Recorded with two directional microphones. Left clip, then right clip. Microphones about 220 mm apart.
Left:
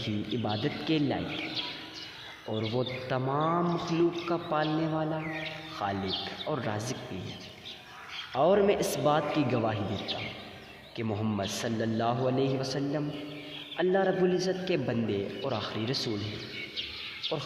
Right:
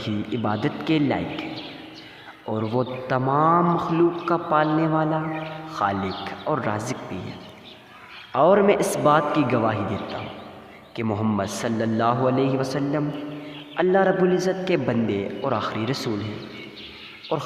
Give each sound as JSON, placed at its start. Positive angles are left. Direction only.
{"t": 0.0, "sound": "a man's voice", "side_deg": -30}
{"t": 2.7, "sound": "a man's voice", "side_deg": -30}
{"t": 8.3, "sound": "a man's voice", "side_deg": -30}
{"t": 10.9, "sound": "a man's voice", "side_deg": -30}
{"t": 17.3, "sound": "a man's voice", "side_deg": -30}